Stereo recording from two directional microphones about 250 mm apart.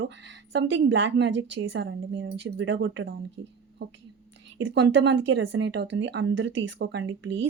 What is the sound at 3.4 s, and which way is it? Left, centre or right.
Speech, right.